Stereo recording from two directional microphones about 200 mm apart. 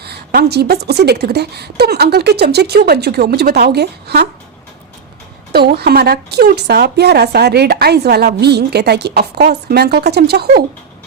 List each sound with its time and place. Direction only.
0.0 s a woman's voice: 55° right (ahead or behind)
5.5 s a woman's voice: 55° right (ahead or behind)